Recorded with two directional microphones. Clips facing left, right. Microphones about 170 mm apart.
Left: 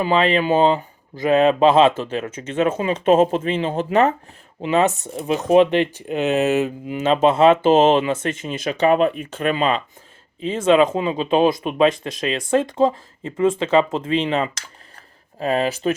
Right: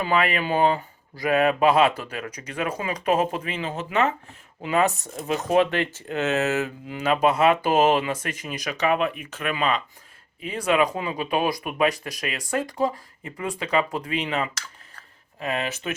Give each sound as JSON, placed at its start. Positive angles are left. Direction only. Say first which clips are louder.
{"t": 0.0, "sound": "speech", "louder": "left 6 dB", "side_deg": 25}
{"t": 4.6, "sound": "speech", "louder": "left 4 dB", "side_deg": 20}